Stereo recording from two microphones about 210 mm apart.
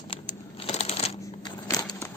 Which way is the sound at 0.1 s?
30° left (ahead or behind).